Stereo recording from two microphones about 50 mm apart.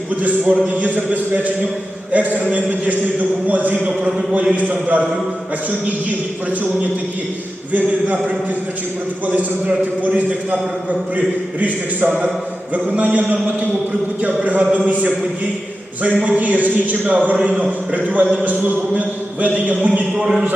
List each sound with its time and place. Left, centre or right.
0.2 s a man's voice: right
7.7 s a man's voice: right
9.2 s a man's voice: right
11.6 s a man's voice: right
16.2 s a man's voice: right
20.1 s a man's voice: centre